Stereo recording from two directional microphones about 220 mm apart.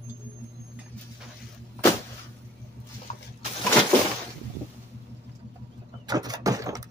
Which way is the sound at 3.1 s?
30° left (ahead or behind).